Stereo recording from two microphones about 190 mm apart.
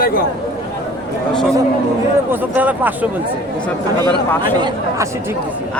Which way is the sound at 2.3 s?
10° right (ahead or behind).